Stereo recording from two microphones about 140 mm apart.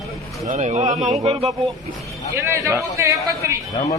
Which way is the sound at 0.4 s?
60° right (ahead or behind).